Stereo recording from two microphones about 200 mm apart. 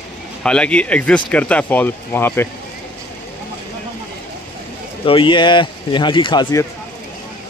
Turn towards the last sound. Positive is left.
turn(degrees=20)  # may be behind; listen again after turning